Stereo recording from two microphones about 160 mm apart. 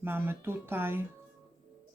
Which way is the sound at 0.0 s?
15° right (ahead or behind).